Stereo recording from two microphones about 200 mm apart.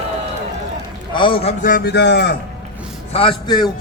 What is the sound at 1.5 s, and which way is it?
Speech, 45° left (ahead or behind).